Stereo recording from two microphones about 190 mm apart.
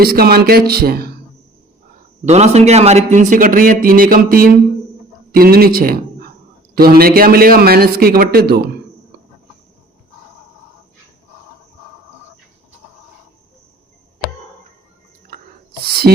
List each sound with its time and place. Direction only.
0.0 s a man's voice: 55° right (ahead or behind)
2.2 s a man's voice: 35° right (ahead or behind); by 8.7 s 55° right (ahead or behind)
16.1 s music: 55° right (ahead or behind)